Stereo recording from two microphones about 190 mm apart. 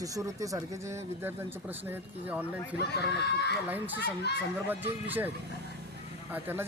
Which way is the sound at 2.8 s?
60° left (ahead or behind).